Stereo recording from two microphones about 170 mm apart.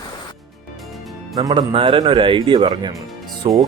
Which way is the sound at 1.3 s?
25° right (ahead or behind).